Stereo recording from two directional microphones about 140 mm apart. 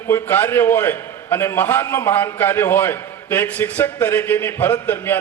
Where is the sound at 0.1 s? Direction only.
15° left (ahead or behind).